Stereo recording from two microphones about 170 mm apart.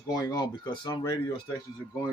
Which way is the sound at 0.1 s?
25° left (ahead or behind).